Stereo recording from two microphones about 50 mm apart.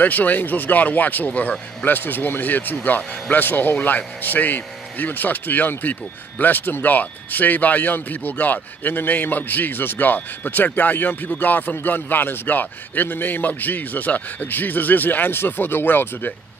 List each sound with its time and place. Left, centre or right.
0.0 s speech: left
1.9 s speech: left